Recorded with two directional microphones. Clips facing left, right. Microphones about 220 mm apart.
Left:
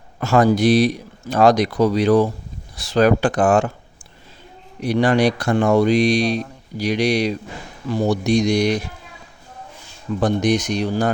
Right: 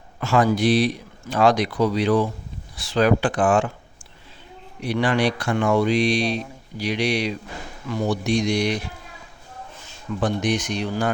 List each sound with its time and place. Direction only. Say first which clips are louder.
0.2 s speech: left 4 dB; 40° left (ahead or behind)
4.8 s speech: left 5 dB; 40° left (ahead or behind)
10.2 s speech: left 5 dB; 40° left (ahead or behind)